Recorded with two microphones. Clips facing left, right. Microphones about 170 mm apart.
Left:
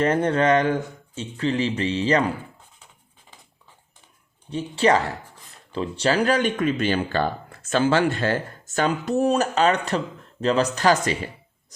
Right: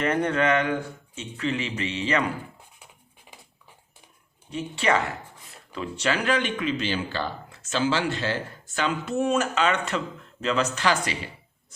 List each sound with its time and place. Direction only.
0.0 s speech: 30° left (ahead or behind)
4.4 s speech: 30° left (ahead or behind)